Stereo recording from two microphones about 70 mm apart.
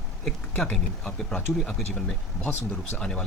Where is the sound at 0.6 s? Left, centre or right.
Centre.